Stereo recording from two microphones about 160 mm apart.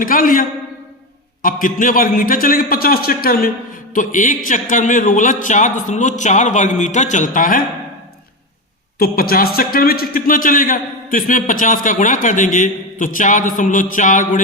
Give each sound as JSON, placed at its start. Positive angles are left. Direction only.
{"t": 0.0, "sound": "a man's voice", "side_deg": 60}
{"t": 3.9, "sound": "a man's voice", "side_deg": 55}
{"t": 9.0, "sound": "a man's voice", "side_deg": 70}